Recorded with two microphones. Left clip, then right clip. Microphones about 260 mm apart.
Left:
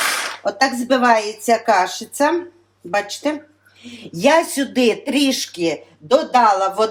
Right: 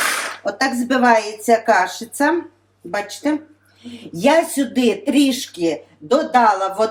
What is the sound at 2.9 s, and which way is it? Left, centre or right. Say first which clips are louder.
Speech: left 2 dB; centre.